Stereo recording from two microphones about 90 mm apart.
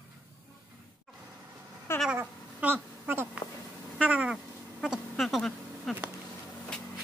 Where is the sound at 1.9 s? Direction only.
30° left (ahead or behind).